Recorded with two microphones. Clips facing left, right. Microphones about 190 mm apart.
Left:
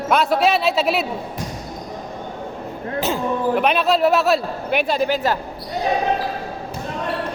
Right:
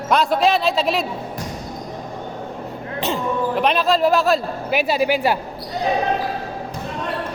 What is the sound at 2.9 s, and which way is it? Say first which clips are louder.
A man's voice: left 1 dB; centre (ahead or behind).